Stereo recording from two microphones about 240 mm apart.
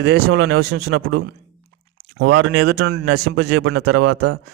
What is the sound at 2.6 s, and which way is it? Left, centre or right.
Speech, right.